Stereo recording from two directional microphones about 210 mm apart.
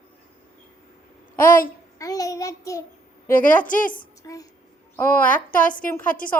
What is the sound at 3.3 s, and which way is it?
Speech, 40° left (ahead or behind).